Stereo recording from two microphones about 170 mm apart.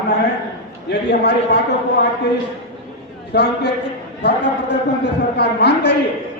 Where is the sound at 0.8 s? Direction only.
75° left (ahead or behind).